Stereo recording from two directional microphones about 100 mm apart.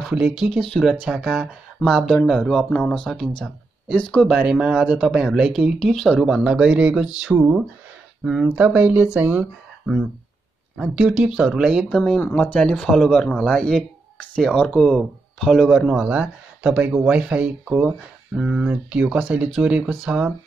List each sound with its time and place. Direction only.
0.4 s speech: 5° left (ahead or behind)
4.3 s speech: 10° right (ahead or behind)
10.8 s speech: 5° right (ahead or behind)
12.2 s speech: 15° left (ahead or behind); by 18.7 s 5° right (ahead or behind)
18.7 s speech: 15° right (ahead or behind)